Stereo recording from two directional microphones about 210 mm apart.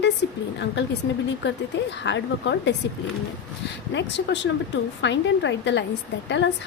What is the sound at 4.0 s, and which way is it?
A woman's voice, 55° left (ahead or behind).